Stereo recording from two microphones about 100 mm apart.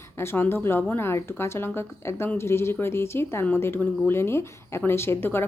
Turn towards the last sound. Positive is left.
turn(degrees=25)  # may be behind; listen again after turning